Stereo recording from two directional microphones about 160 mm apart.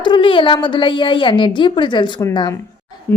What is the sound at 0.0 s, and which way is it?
A woman's voice, 30° left (ahead or behind).